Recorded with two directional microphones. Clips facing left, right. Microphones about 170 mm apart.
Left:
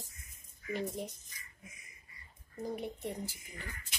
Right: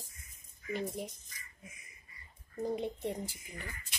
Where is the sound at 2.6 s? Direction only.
20° right (ahead or behind).